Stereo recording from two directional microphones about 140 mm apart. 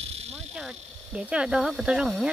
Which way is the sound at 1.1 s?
5° right (ahead or behind).